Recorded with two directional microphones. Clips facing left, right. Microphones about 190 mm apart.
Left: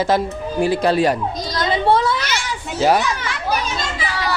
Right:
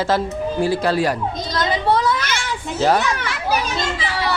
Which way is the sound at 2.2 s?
55° right (ahead or behind).